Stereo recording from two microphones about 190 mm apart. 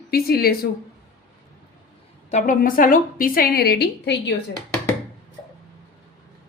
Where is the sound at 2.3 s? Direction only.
45° left (ahead or behind); by 4.2 s 60° left (ahead or behind).